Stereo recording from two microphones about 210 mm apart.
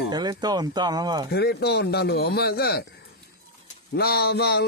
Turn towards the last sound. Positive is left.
turn(degrees=50)  # may be behind; listen again after turning